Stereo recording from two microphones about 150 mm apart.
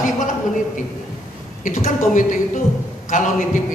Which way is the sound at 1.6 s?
55° left (ahead or behind).